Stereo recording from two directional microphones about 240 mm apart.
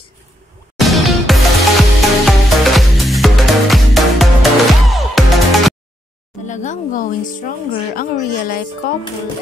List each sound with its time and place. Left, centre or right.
0.7 s music: centre
6.4 s speech: left